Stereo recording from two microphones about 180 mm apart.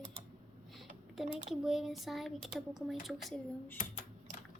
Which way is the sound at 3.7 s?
45° left (ahead or behind).